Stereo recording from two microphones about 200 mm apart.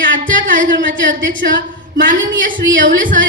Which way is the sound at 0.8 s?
65° right (ahead or behind).